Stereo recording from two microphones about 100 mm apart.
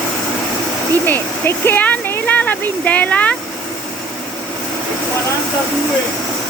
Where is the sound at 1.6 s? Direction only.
15° left (ahead or behind).